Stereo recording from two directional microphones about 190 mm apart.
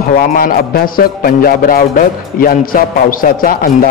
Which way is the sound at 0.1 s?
45° left (ahead or behind).